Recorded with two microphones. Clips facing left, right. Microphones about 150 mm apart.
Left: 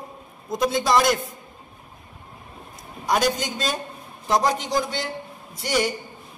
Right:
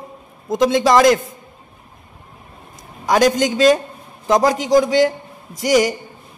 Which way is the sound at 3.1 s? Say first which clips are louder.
Right 8 dB; 90° right.